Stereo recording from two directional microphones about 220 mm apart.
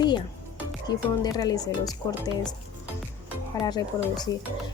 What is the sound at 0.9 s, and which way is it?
Speech, 20° left (ahead or behind).